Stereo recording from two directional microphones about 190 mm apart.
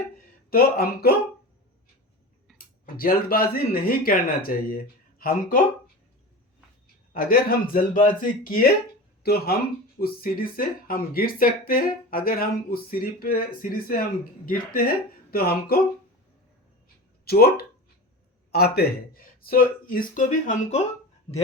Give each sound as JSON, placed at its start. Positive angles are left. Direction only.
{"t": 0.5, "sound": "speech", "side_deg": 55}
{"t": 2.8, "sound": "speech", "side_deg": 50}
{"t": 7.1, "sound": "speech", "side_deg": 50}
{"t": 17.2, "sound": "speech", "side_deg": 55}